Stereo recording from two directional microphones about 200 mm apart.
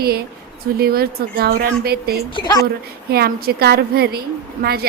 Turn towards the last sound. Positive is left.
turn(degrees=-50)  # may be behind; listen again after turning